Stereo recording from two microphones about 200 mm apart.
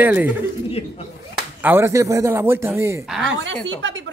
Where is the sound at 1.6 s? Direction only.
10° right (ahead or behind).